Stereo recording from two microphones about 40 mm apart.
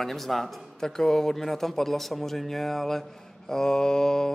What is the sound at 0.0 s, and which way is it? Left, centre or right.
Speech, centre.